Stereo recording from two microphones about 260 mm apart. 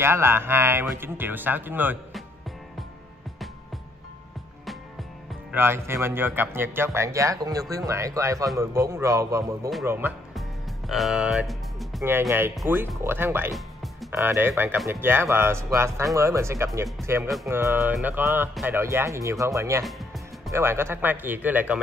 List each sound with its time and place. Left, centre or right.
0.0 s speech: centre
5.5 s speech: centre